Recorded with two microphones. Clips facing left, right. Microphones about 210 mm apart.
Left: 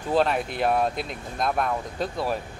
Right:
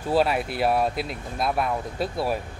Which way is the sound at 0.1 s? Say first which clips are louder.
Right 1 dB; 5° right (ahead or behind).